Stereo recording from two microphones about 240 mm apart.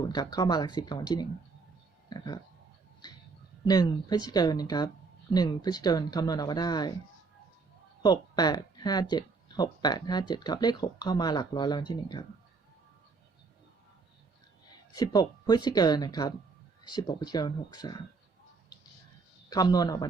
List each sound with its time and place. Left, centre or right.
0.1 s speech: centre
3.7 s speech: centre
8.0 s speech: centre
14.9 s speech: centre
19.5 s speech: centre